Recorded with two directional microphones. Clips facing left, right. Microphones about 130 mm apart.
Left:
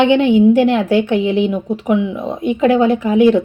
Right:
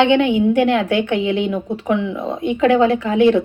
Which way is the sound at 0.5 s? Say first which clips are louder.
Left 3 dB; 25° left (ahead or behind).